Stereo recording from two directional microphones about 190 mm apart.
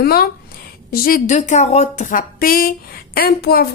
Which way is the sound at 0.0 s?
55° left (ahead or behind).